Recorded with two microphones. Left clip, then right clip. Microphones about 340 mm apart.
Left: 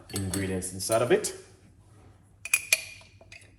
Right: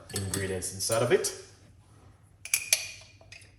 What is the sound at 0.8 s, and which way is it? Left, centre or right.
Speech, left.